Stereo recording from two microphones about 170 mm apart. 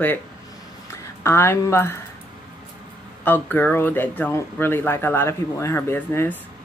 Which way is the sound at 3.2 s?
10° left (ahead or behind).